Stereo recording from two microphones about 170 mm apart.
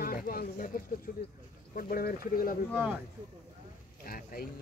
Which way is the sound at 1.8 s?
60° left (ahead or behind).